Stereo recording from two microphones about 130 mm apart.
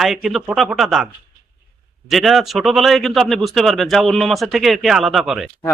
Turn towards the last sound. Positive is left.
turn(degrees=-5)  # may be behind; listen again after turning